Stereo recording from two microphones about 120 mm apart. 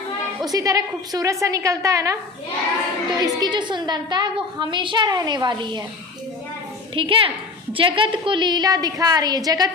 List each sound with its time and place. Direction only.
0.4 s a woman's voice: 30° right (ahead or behind)
6.9 s a woman's voice: 45° right (ahead or behind)